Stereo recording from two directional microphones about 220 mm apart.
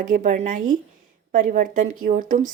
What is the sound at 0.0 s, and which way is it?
Speech, 35° right (ahead or behind).